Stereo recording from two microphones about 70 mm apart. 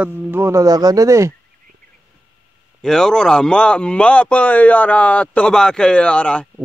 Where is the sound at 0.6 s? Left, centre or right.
Right.